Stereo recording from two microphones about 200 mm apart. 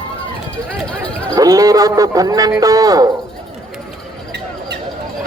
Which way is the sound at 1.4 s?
20° right (ahead or behind).